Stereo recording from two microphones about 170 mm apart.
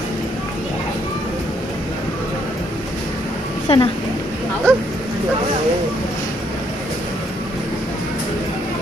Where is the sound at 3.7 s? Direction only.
35° left (ahead or behind).